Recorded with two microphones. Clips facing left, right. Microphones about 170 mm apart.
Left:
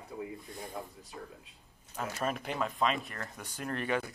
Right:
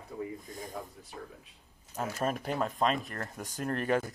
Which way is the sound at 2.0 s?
40° right (ahead or behind).